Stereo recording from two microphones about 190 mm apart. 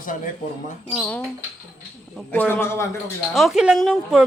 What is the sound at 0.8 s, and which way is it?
A man's voice, 10° left (ahead or behind).